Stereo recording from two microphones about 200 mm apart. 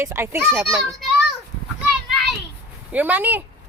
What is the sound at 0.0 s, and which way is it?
Speech, 10° right (ahead or behind).